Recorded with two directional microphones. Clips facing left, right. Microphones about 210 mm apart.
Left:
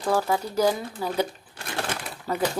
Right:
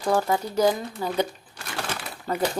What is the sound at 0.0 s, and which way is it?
Speech, 10° right (ahead or behind).